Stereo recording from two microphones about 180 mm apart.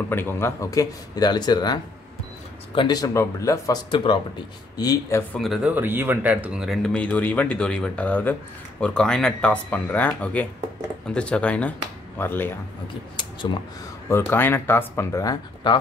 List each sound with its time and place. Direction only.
0.1 s speech: 15° left (ahead or behind)
5.3 s speech: centre (ahead or behind)
13.1 s speech: 25° left (ahead or behind)
14.0 s speech: 15° left (ahead or behind)